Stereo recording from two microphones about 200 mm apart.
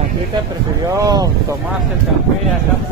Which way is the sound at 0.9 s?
15° right (ahead or behind).